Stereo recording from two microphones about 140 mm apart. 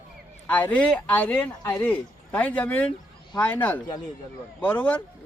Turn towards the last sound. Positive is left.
turn(degrees=10)  # may be behind; listen again after turning